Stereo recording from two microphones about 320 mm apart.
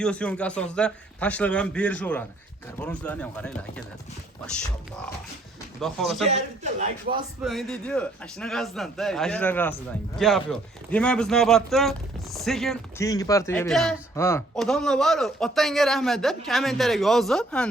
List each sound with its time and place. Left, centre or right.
0.0 s speech: centre
5.8 s speech: centre
6.2 s a man's voice: right
7.4 s speech: centre